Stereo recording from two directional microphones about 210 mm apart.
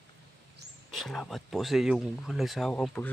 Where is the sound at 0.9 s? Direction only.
Centre (ahead or behind).